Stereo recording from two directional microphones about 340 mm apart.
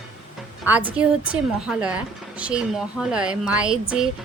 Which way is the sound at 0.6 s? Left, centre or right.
Centre.